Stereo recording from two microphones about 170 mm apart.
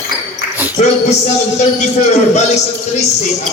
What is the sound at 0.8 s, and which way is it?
A man's voice, 40° left (ahead or behind).